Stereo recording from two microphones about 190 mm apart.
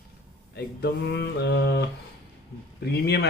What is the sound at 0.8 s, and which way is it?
Speech, 60° left (ahead or behind).